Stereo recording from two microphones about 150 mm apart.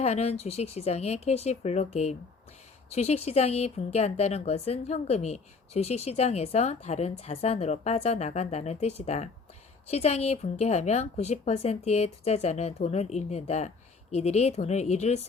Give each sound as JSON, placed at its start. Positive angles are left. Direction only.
{"t": 0.0, "sound": "speech", "side_deg": 45}